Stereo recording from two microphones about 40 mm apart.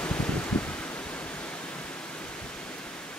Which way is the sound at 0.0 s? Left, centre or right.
Left.